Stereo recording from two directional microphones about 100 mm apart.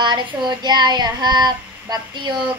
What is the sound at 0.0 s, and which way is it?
Child singing, 50° right (ahead or behind).